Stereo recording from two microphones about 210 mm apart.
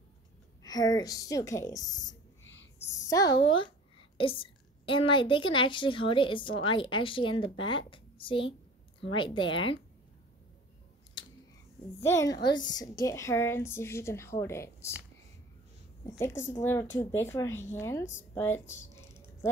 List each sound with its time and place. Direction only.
0.6 s a woman's voice: 20° left (ahead or behind)
3.1 s a woman's voice: 15° left (ahead or behind)
12.0 s a woman's voice: 15° left (ahead or behind)
16.1 s a woman's voice: 15° left (ahead or behind)